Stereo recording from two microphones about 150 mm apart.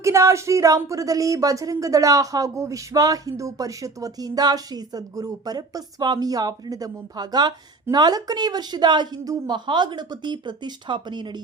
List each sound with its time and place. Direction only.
0.0 s speech: 20° right (ahead or behind)